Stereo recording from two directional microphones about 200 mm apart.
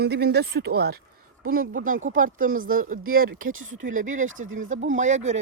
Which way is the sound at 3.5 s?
85° right.